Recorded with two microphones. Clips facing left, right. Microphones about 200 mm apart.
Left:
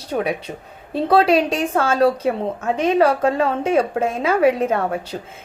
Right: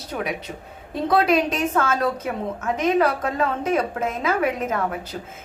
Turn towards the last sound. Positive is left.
turn(degrees=30)  # may be behind; listen again after turning